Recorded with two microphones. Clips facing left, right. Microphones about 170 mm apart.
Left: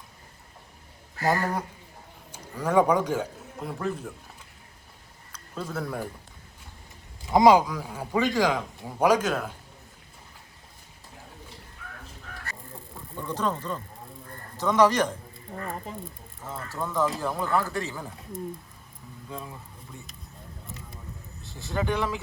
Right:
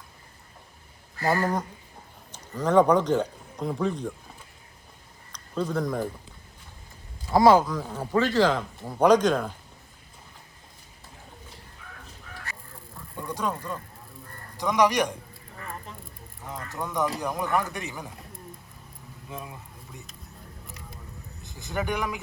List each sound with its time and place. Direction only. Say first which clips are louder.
1.2 s speech: right 1 dB; 15° left (ahead or behind)
5.3 s speech: right 6 dB; 5° left (ahead or behind)
7.3 s speech: even; 15° left (ahead or behind)
13.1 s speech: left 1 dB; 10° right (ahead or behind)
16.6 s speech: left 1 dB; 15° right (ahead or behind)
19.3 s speech: even; 15° right (ahead or behind)
21.4 s speech: left 1 dB; 15° right (ahead or behind)